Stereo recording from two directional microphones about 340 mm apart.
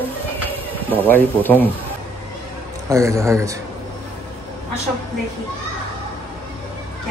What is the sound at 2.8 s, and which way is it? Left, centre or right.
Speech, centre.